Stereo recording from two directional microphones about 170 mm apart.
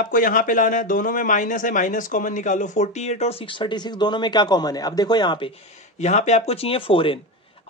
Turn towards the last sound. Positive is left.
turn(degrees=30)  # may be behind; listen again after turning